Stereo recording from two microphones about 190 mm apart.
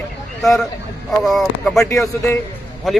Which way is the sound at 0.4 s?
Centre (ahead or behind).